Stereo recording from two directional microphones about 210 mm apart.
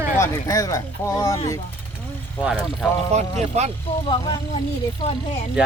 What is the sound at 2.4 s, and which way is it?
Speech, 5° right (ahead or behind).